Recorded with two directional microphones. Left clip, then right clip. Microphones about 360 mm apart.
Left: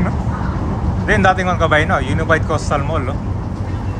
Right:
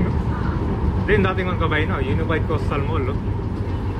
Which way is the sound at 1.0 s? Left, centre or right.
Centre.